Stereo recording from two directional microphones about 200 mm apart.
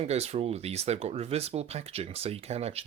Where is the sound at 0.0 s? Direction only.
30° right (ahead or behind).